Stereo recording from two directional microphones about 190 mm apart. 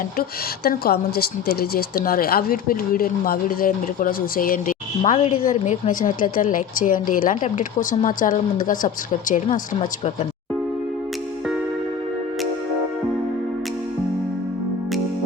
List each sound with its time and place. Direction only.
0.2 s speech: 50° left (ahead or behind)